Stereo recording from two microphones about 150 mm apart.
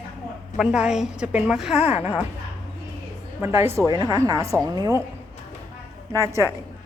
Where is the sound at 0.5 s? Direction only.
5° right (ahead or behind).